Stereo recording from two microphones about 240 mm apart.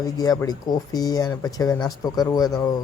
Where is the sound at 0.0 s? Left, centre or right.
Centre.